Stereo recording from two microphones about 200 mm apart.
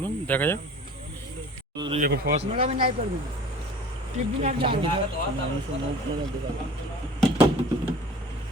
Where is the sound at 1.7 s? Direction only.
25° right (ahead or behind).